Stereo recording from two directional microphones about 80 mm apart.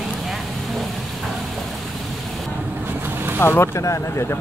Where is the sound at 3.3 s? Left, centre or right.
Left.